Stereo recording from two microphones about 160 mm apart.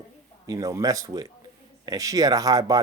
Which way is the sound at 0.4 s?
20° right (ahead or behind).